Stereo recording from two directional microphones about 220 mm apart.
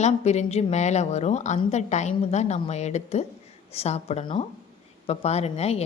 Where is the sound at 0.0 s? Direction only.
30° left (ahead or behind).